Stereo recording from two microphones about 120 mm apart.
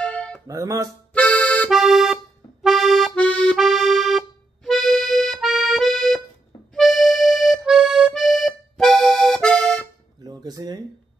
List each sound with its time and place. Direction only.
0.0 s music: 10° left (ahead or behind)
0.5 s speech: 30° right (ahead or behind)
1.1 s accordion: 10° left (ahead or behind)
1.7 s accordion: centre (ahead or behind)
3.2 s accordion: 10° left (ahead or behind)
3.5 s accordion: centre (ahead or behind)
6.7 s music: centre (ahead or behind)
8.1 s accordion: centre (ahead or behind)
10.2 s music: 35° right (ahead or behind)